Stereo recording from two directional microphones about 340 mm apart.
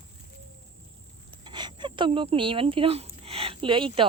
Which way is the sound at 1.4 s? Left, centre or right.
Centre.